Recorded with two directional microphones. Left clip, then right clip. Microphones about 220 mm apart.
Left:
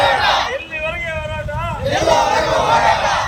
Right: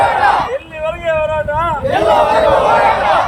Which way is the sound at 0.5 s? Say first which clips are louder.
Right 2 dB; 35° right (ahead or behind).